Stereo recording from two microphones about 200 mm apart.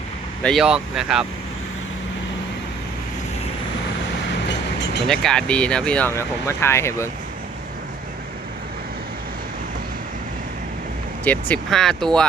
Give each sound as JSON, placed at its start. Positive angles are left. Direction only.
{"t": 0.4, "sound": "speech", "side_deg": 0}
{"t": 5.0, "sound": "speech", "side_deg": 0}
{"t": 11.3, "sound": "speech", "side_deg": 5}